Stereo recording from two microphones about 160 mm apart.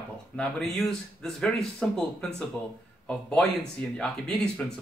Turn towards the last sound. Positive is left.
turn(degrees=5)  # may be behind; listen again after turning